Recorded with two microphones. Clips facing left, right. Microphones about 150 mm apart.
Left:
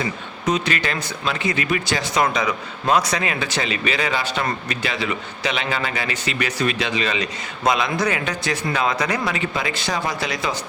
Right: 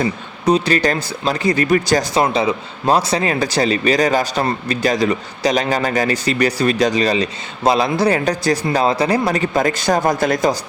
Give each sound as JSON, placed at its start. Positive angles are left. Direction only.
{"t": 0.0, "sound": "speech", "side_deg": -35}
{"t": 2.2, "sound": "speech", "side_deg": -30}